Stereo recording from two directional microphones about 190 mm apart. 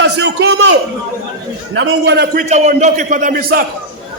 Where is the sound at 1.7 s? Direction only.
75° right (ahead or behind); by 2.4 s 60° right (ahead or behind).